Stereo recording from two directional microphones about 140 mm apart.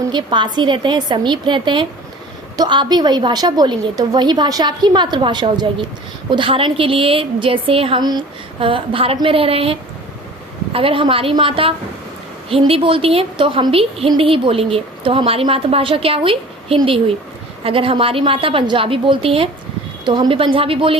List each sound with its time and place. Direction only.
0.1 s a woman's voice: 35° right (ahead or behind)